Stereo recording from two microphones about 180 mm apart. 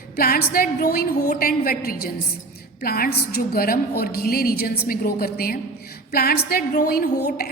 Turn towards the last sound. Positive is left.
turn(degrees=55)  # may be behind; listen again after turning